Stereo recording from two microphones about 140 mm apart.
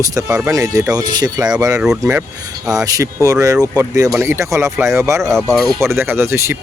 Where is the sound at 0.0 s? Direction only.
25° right (ahead or behind).